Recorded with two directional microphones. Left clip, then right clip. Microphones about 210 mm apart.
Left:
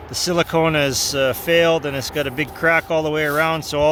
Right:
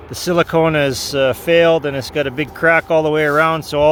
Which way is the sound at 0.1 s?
15° right (ahead or behind).